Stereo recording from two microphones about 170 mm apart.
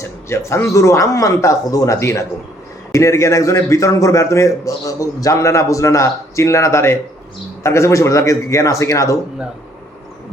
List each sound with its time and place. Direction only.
0.0 s a man's voice: 15° left (ahead or behind)